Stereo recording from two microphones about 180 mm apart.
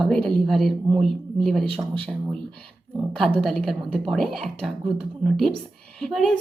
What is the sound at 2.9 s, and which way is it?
A woman's voice, centre (ahead or behind).